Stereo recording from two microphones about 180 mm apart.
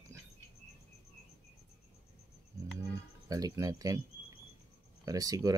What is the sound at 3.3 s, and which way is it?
Speech, 20° right (ahead or behind).